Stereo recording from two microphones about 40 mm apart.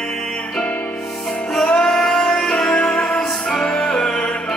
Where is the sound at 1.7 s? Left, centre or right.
Centre.